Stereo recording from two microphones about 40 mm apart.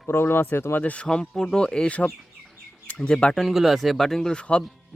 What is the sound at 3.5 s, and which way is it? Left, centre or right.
Speech, centre.